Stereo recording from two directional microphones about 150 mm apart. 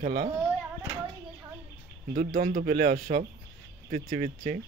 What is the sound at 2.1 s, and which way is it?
Speech, 70° right (ahead or behind).